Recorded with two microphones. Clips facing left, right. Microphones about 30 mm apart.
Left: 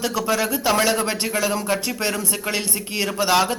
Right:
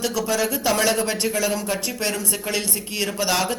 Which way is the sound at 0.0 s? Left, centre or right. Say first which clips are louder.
Left 1 dB; centre.